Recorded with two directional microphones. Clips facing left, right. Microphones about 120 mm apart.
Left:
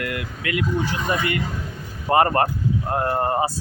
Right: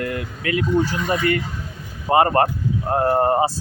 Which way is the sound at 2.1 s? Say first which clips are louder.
Right 2 dB; 25° right (ahead or behind).